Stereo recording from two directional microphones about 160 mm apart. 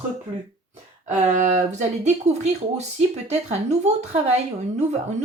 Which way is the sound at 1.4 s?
45° right (ahead or behind).